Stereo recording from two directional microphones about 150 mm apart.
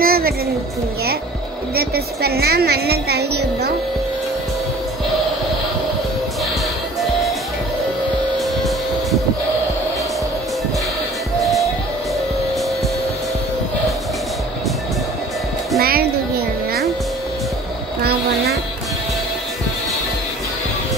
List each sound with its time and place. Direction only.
0.0 s music: 85° right
1.8 s speech: 90° right
8.4 s music: centre (ahead or behind)
11.3 s music: centre (ahead or behind)
15.8 s music: 90° right
18.0 s a sound: 90° right